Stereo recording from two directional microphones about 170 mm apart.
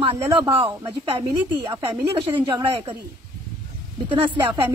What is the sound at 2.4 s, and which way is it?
Speech, 30° right (ahead or behind).